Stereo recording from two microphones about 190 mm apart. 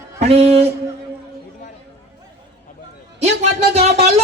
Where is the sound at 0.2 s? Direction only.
35° right (ahead or behind).